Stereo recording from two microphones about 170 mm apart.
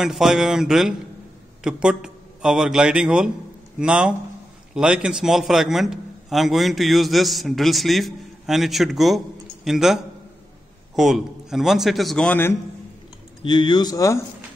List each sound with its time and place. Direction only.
0.0 s a man's voice: 5° right (ahead or behind)
13.4 s speech: 25° left (ahead or behind)